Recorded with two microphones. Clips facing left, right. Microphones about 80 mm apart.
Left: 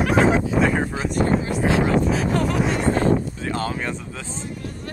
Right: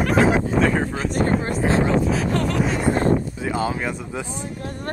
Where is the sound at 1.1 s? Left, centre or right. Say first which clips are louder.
Even; right.